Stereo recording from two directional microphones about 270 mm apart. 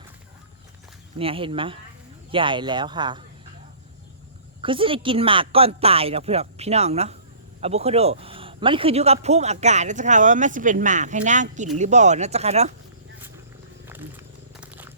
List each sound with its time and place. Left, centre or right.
1.2 s a man's voice: centre
4.6 s a man's voice: centre
14.5 s purr: centre